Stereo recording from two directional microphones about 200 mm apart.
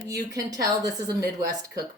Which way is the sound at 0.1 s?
15° right (ahead or behind).